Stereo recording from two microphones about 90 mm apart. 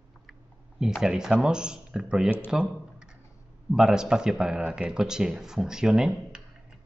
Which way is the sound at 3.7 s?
5° right (ahead or behind).